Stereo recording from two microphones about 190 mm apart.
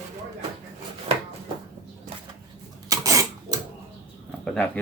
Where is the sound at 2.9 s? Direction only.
15° right (ahead or behind).